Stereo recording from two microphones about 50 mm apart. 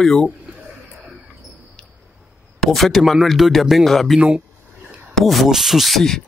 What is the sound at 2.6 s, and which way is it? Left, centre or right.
Speech, centre.